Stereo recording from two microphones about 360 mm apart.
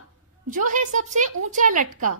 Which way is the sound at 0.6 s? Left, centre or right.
Centre.